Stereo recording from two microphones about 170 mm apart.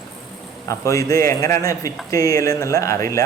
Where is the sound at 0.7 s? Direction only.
20° left (ahead or behind).